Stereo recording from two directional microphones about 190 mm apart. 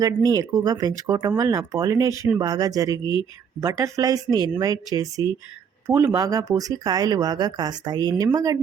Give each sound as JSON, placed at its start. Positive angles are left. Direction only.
{"t": 0.0, "sound": "speech", "side_deg": -20}